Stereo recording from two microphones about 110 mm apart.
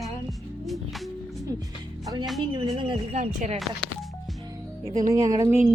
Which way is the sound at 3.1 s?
80° right.